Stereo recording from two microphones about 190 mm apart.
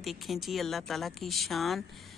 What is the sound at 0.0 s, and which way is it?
A man's voice, centre (ahead or behind).